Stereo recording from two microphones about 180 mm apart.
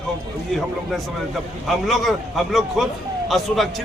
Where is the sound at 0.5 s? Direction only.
Centre (ahead or behind).